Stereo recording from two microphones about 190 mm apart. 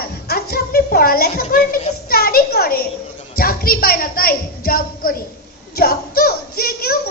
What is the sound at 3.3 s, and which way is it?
A woman's voice, 50° left (ahead or behind).